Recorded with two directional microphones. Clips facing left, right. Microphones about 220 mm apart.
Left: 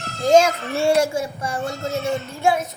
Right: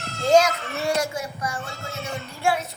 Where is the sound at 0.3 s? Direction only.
25° left (ahead or behind).